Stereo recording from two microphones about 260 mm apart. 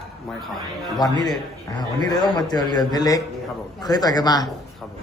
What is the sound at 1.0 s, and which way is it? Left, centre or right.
A man's voice, centre.